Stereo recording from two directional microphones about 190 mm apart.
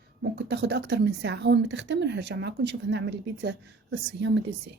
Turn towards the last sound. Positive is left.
turn(degrees=-70)  # may be behind; listen again after turning